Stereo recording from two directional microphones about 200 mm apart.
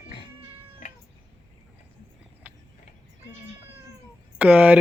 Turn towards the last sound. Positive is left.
turn(degrees=-5)  # may be behind; listen again after turning